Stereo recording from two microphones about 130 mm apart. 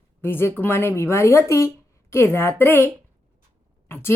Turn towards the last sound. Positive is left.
turn(degrees=20)  # may be behind; listen again after turning